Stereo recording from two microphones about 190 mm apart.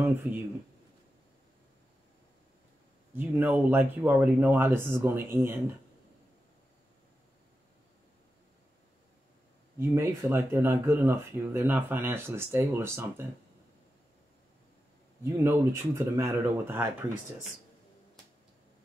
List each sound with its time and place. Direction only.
0.0 s speech: 10° right (ahead or behind)
3.2 s speech: 10° right (ahead or behind)
9.8 s speech: 15° right (ahead or behind)
15.2 s speech: 15° right (ahead or behind)